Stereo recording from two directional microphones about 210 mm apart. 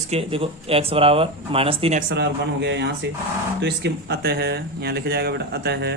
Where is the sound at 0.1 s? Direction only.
30° right (ahead or behind).